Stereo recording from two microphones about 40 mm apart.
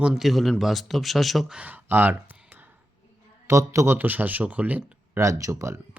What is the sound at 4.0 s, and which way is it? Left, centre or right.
Speech, right.